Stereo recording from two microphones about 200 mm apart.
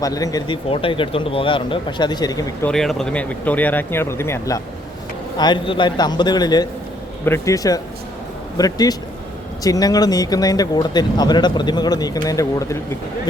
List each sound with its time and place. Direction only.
0.0 s speech: 15° left (ahead or behind)
2.6 s speech: 5° left (ahead or behind)